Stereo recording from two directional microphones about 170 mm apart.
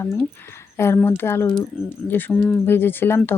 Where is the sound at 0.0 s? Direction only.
15° left (ahead or behind).